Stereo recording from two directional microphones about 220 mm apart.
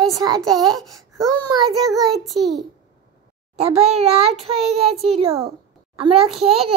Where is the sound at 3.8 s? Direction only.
30° right (ahead or behind).